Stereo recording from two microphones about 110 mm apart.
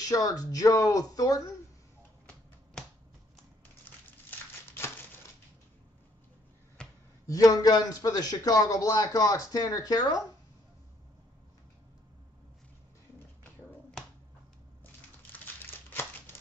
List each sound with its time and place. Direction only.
0.0 s a man's voice: 35° left (ahead or behind)
4.3 s crumpling: 25° left (ahead or behind)
6.8 s a sound: 10° left (ahead or behind)
7.2 s a man's voice: 30° left (ahead or behind)
15.3 s crumpling: 20° left (ahead or behind)